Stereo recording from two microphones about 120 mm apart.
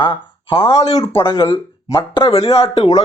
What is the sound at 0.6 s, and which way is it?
Speech, 30° left (ahead or behind).